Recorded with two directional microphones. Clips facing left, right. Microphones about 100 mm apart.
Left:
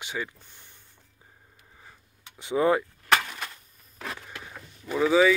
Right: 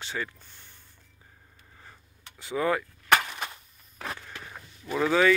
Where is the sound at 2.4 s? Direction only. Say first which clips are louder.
Left 4 dB; 25° left (ahead or behind).